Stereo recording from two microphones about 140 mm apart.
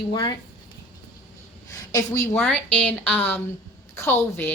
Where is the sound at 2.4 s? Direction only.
5° left (ahead or behind).